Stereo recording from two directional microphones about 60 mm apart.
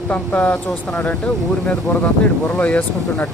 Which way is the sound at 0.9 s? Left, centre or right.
Centre.